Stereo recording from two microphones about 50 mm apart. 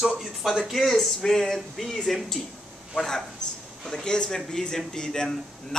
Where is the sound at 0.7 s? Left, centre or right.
Centre.